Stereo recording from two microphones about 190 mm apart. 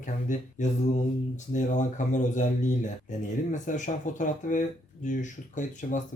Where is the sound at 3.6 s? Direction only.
40° left (ahead or behind).